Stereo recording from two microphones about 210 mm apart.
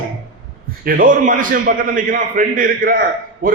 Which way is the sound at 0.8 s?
40° right (ahead or behind).